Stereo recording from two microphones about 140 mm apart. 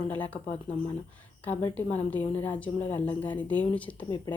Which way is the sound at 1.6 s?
10° left (ahead or behind).